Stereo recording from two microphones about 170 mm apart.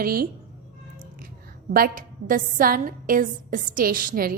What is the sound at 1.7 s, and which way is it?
A woman's voice, 55° right (ahead or behind).